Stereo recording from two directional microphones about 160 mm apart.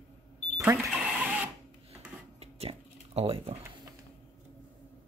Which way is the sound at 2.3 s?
40° right (ahead or behind).